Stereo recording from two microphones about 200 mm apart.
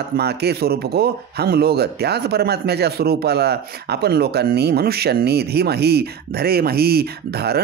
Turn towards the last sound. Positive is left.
turn(degrees=-55)  # may be behind; listen again after turning